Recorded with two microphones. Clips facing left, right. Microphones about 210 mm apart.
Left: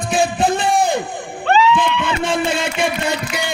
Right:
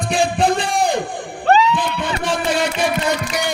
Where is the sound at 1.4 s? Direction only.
40° right (ahead or behind).